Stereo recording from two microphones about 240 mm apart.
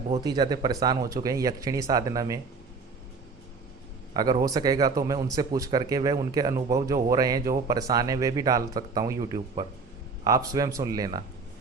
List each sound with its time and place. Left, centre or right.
0.2 s speech: centre
4.1 s speech: centre